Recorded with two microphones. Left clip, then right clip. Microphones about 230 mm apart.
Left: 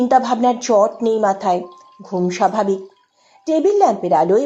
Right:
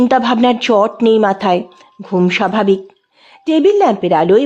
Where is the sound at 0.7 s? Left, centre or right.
Right.